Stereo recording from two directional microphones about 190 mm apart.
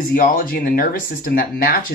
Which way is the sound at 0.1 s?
50° left (ahead or behind).